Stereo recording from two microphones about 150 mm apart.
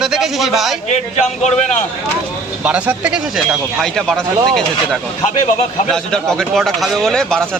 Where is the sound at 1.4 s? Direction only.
50° left (ahead or behind).